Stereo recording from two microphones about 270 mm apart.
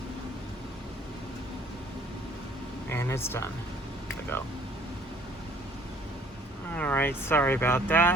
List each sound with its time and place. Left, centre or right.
2.9 s speech: centre
6.7 s speech: centre